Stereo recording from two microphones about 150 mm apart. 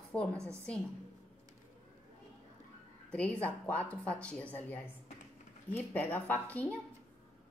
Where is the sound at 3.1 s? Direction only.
10° left (ahead or behind).